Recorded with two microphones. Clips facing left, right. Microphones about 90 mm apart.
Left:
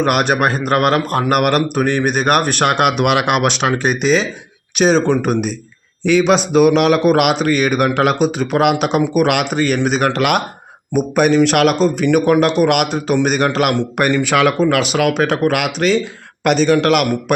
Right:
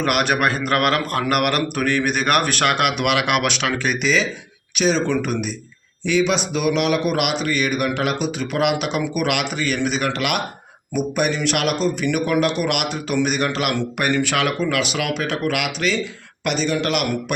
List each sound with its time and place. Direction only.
0.0 s a man's voice: 30° left (ahead or behind)
6.1 s speech: 50° left (ahead or behind)
8.2 s speech: 45° left (ahead or behind)
11.5 s speech: 55° left (ahead or behind)
11.8 s a man's voice: 40° left (ahead or behind); by 17.3 s 60° left (ahead or behind)